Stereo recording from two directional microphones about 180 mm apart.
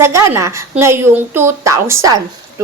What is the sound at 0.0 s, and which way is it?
A woman's voice, 15° right (ahead or behind).